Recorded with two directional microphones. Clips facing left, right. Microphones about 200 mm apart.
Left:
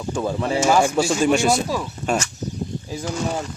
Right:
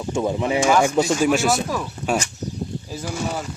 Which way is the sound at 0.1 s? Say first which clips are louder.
Right 1 dB; 15° right (ahead or behind).